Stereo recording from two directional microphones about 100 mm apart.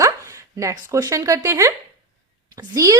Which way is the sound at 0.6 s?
40° right (ahead or behind).